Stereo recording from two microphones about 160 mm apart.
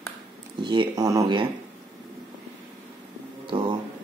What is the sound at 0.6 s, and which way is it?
Speech, 30° right (ahead or behind).